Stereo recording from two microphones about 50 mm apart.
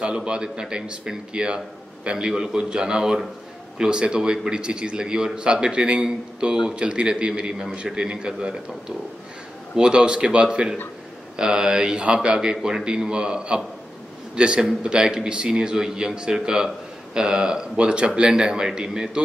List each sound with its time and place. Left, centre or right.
0.0 s a man's voice: centre